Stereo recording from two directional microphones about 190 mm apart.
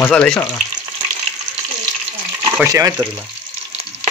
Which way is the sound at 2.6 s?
15° right (ahead or behind).